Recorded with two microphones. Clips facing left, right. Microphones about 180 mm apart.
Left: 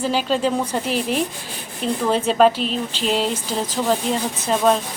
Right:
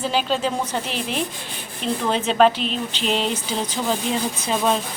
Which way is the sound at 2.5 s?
40° left (ahead or behind).